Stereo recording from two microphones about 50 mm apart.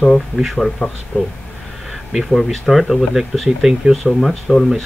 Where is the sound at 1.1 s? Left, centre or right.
Left.